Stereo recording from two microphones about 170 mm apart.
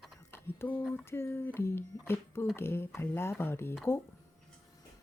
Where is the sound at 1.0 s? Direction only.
15° left (ahead or behind).